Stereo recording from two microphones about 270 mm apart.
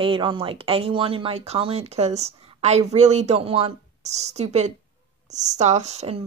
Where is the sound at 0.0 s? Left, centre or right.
Centre.